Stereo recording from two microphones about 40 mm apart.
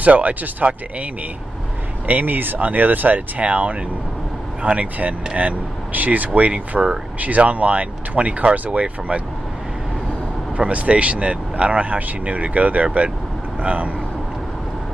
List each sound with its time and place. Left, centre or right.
0.0 s speech: right
2.0 s speech: right
6.7 s speech: centre
7.2 s speech: right
10.6 s speech: right